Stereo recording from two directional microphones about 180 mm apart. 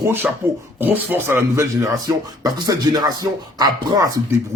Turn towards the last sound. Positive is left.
turn(degrees=-20)  # may be behind; listen again after turning